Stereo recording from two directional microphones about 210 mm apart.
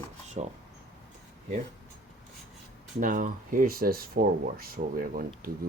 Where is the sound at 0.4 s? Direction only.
30° right (ahead or behind).